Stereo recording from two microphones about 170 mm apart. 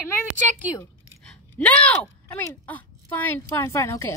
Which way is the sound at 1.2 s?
5° left (ahead or behind).